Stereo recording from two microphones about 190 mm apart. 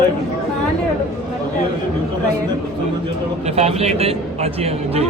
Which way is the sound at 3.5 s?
35° right (ahead or behind).